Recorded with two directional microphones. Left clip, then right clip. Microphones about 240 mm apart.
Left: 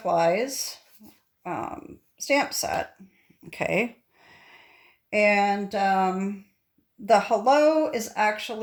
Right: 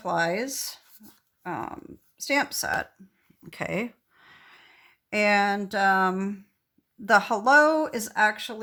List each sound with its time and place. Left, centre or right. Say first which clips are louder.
0.0 s speech: left 4 dB; centre
3.4 s a sound: left 5 dB; centre
7.0 s speech: left 1 dB; centre